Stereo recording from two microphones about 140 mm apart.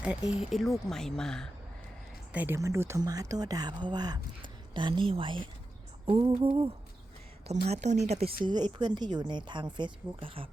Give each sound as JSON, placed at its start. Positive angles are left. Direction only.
{"t": 0.0, "sound": "speech", "side_deg": -10}
{"t": 2.3, "sound": "speech", "side_deg": -10}
{"t": 8.8, "sound": "speech", "side_deg": -30}